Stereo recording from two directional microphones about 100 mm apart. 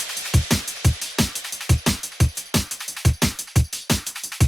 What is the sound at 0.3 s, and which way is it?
Music, centre (ahead or behind).